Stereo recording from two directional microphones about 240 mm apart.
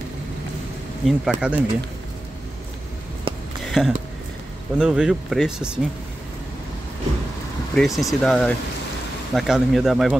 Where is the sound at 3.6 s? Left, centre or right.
Centre.